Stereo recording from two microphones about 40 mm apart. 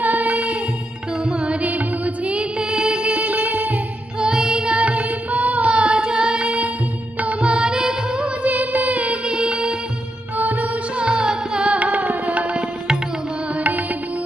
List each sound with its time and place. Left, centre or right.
0.0 s music: right
1.2 s music: right
1.6 s music: right
2.6 s music: right
3.2 s music: right
4.2 s music: centre
4.8 s carnatic music: right
6.1 s music: right
7.2 s music: right
7.6 s music: right
8.5 s music: right
9.2 s music: right
10.3 s music: right
11.0 s music: right